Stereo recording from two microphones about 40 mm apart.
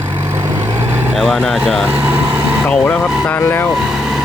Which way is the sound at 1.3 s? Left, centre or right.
Centre.